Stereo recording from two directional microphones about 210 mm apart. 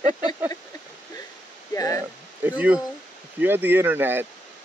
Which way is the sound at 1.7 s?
15° left (ahead or behind).